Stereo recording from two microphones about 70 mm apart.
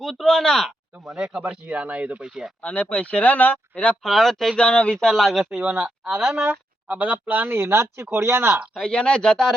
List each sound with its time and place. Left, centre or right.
0.0 s speech: centre
1.1 s speech: centre
2.6 s speech: centre
4.0 s speech: centre
5.0 s speech: centre; by 8.6 s right
8.7 s speech: centre